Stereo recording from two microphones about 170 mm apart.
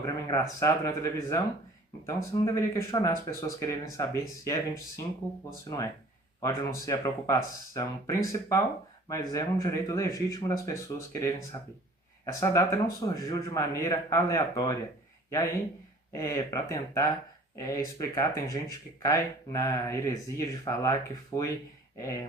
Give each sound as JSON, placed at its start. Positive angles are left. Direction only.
{"t": 0.0, "sound": "a man's voice", "side_deg": 20}
{"t": 6.4, "sound": "a man's voice", "side_deg": 20}
{"t": 16.1, "sound": "a man's voice", "side_deg": 15}